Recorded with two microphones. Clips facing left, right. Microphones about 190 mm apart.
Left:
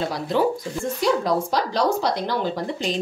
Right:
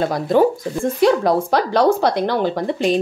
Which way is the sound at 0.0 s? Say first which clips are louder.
Right 6 dB; 50° right (ahead or behind).